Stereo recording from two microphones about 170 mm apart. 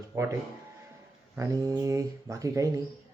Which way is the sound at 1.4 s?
20° right (ahead or behind).